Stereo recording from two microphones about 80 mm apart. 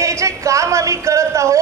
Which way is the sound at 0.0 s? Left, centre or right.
Right.